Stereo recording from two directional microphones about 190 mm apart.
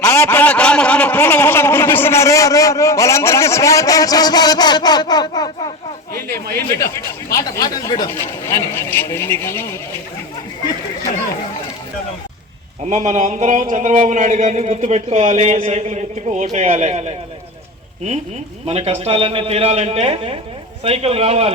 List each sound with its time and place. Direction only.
0.0 s a man's voice: 15° left (ahead or behind)
6.7 s a man's voice: 15° left (ahead or behind)
12.9 s speech: 40° right (ahead or behind)
18.6 s speech: 35° right (ahead or behind)